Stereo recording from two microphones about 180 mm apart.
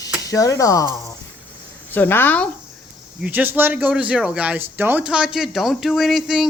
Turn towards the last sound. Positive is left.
turn(degrees=0)  # may be behind; listen again after turning